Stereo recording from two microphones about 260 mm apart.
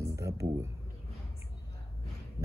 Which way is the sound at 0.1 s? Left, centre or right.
Centre.